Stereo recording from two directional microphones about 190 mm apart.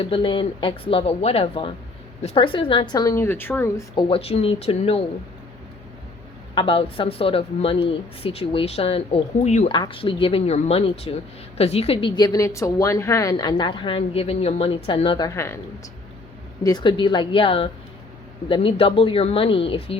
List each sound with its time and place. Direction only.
0.0 s speech: 25° left (ahead or behind)
4.1 s speech: 30° left (ahead or behind)
6.5 s speech: 25° left (ahead or behind)
9.7 s speech: 25° left (ahead or behind)
16.6 s speech: 25° left (ahead or behind)